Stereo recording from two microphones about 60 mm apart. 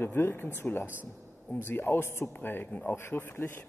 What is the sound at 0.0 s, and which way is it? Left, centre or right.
Speech, left.